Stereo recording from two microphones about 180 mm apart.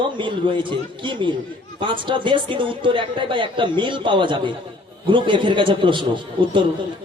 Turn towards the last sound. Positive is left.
turn(degrees=-25)  # may be behind; listen again after turning